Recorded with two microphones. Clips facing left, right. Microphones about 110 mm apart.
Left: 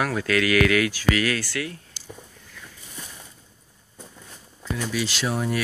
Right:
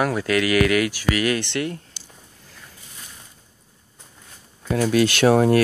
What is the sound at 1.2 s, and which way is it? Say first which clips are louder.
Speech: right 4 dB; 25° right (ahead or behind).